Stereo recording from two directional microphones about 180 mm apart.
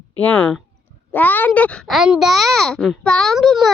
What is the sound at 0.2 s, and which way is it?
A child's voice, 10° left (ahead or behind).